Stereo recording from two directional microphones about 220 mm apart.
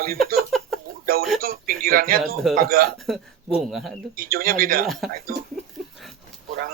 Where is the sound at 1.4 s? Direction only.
40° right (ahead or behind).